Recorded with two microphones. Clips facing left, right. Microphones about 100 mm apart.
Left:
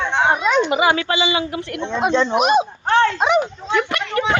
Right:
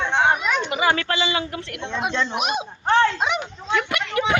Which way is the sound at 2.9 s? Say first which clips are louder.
Left 5 dB; 30° left (ahead or behind).